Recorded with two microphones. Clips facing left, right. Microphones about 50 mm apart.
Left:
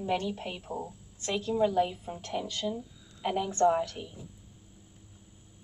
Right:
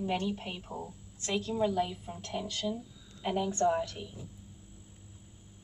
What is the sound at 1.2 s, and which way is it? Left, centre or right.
Speech, centre.